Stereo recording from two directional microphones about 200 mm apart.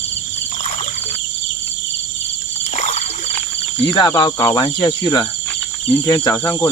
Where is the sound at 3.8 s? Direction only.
25° left (ahead or behind).